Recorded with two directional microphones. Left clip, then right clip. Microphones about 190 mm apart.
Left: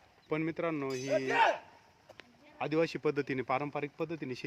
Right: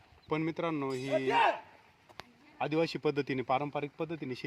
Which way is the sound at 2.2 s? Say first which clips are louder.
Right 2 dB; 40° right (ahead or behind).